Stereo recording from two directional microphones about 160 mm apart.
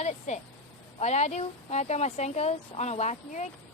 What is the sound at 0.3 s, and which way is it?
Speech, 45° left (ahead or behind).